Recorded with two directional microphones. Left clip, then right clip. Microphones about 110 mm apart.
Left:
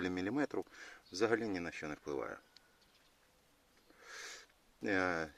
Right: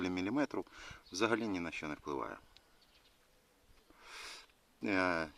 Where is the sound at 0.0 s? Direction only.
10° right (ahead or behind).